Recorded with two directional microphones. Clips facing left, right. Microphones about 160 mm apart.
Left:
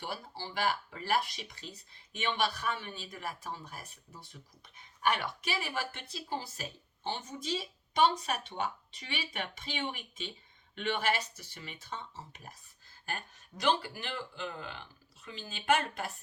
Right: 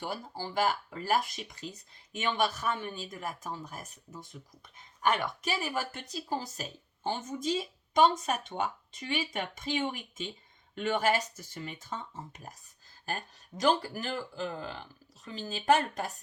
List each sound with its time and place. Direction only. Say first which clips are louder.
0.0 s speech: right 4 dB; 45° right (ahead or behind)